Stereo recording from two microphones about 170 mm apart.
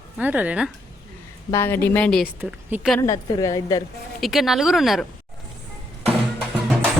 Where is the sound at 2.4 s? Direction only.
10° right (ahead or behind).